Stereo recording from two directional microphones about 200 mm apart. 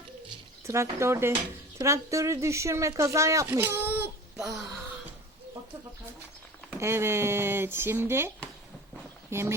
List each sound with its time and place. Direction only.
0.7 s speech: 15° right (ahead or behind)
6.7 s speech: 15° right (ahead or behind)
9.3 s speech: 15° right (ahead or behind)